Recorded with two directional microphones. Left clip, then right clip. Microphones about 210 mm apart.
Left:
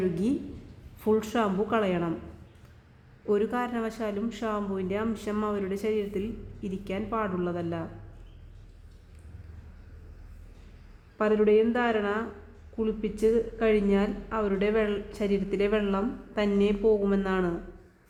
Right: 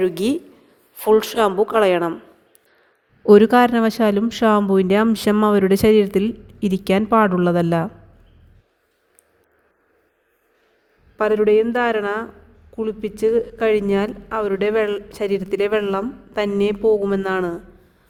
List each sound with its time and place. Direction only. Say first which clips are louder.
0.0 s speech: right 9 dB; 45° right (ahead or behind)
3.2 s speech: right 16 dB; 40° right (ahead or behind)
11.2 s speech: right 7 dB; 45° right (ahead or behind)